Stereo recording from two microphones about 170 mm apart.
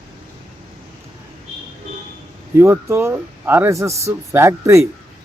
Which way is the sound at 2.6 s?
15° right (ahead or behind).